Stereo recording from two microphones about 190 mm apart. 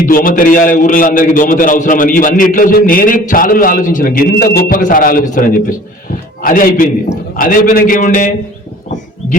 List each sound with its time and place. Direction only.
0.0 s a man's voice: 45° left (ahead or behind)